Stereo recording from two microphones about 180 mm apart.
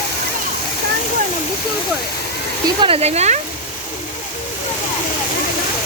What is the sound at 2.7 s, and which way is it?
Speech, 30° right (ahead or behind).